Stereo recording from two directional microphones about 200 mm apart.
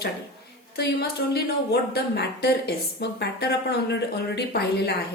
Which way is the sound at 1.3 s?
55° left (ahead or behind).